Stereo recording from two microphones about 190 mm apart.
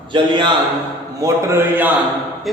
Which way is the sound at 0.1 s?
25° right (ahead or behind).